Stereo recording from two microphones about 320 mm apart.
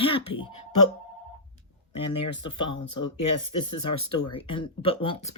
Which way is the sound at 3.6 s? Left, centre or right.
Centre.